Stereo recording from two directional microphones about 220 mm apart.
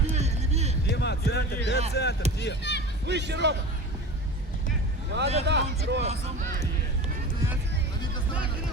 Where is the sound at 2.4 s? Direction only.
50° left (ahead or behind).